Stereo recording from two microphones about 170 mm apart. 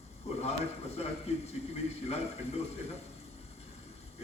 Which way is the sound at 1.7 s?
35° left (ahead or behind).